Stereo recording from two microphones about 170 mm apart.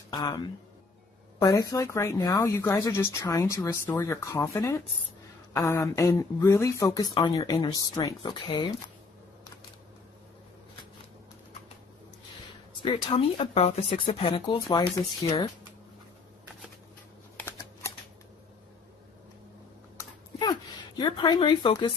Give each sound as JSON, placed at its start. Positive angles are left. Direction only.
{"t": 0.1, "sound": "speech", "side_deg": 25}
{"t": 12.7, "sound": "speech", "side_deg": 30}
{"t": 20.0, "sound": "a sound", "side_deg": 20}
{"t": 21.0, "sound": "speech", "side_deg": 25}